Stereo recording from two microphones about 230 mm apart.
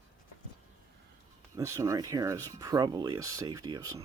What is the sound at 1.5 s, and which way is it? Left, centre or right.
Speech, centre.